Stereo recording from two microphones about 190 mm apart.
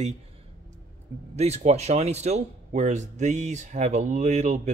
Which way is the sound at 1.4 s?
35° right (ahead or behind).